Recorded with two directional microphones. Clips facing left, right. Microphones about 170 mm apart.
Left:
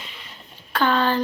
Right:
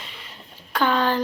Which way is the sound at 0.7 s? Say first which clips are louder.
Left 1 dB; 10° right (ahead or behind).